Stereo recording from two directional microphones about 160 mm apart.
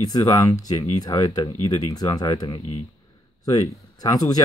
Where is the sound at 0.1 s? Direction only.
25° left (ahead or behind).